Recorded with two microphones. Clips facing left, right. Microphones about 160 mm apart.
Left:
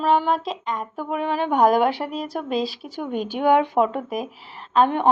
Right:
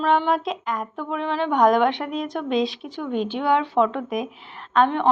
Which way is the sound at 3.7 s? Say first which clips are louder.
Even; 10° left (ahead or behind).